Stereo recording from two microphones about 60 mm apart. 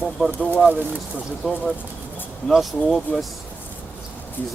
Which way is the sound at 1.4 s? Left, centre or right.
Centre.